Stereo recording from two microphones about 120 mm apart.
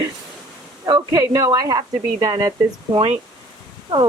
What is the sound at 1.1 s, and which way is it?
Speech, 30° right (ahead or behind).